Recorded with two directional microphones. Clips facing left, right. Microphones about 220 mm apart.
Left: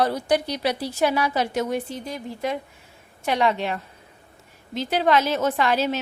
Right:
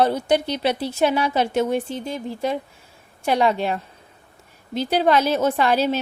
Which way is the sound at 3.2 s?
40° right (ahead or behind).